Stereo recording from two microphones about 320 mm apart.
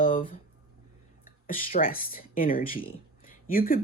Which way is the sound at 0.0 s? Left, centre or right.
Left.